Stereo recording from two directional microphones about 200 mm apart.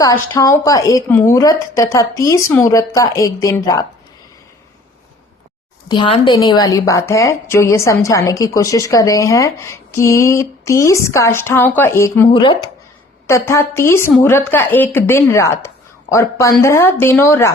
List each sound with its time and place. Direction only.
0.0 s a woman's voice: 15° left (ahead or behind)
5.9 s a woman's voice: 25° left (ahead or behind)
12.3 s speech: 25° left (ahead or behind)
13.2 s a woman's voice: 15° left (ahead or behind)